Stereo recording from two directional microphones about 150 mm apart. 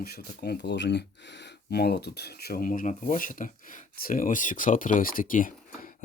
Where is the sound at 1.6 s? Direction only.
90° left.